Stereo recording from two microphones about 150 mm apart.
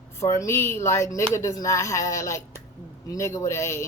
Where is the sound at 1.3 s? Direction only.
20° left (ahead or behind).